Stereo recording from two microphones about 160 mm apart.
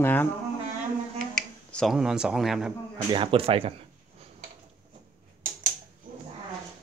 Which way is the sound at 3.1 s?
35° right (ahead or behind).